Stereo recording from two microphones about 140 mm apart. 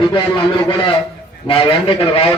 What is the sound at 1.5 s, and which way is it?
Speech, 40° left (ahead or behind).